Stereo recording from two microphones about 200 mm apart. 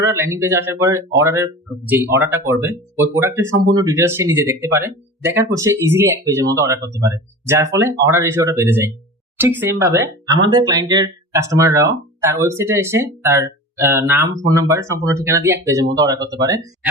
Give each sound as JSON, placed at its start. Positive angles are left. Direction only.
{"t": 0.0, "sound": "speech", "side_deg": -15}